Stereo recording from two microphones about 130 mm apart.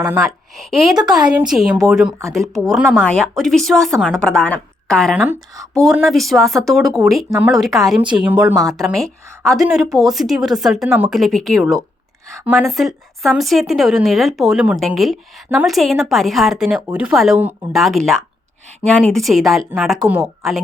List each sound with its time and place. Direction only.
0.0 s a woman's voice: 25° right (ahead or behind)
0.5 s speech: centre (ahead or behind)
5.1 s speech: 10° right (ahead or behind)
8.8 s speech: 5° left (ahead or behind)